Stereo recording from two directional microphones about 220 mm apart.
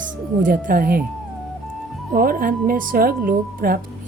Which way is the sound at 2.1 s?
40° right (ahead or behind).